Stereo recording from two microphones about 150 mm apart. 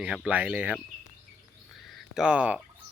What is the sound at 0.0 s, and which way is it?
Speech, 5° right (ahead or behind).